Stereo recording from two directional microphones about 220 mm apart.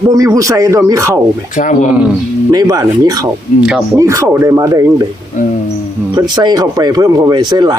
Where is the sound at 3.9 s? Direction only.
15° right (ahead or behind).